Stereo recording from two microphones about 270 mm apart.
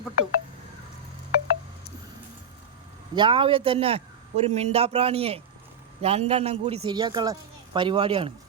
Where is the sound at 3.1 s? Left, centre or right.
Centre.